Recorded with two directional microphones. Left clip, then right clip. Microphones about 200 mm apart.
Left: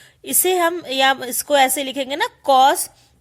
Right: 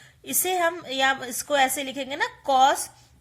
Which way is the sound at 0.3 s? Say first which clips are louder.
Left 6 dB; 40° left (ahead or behind).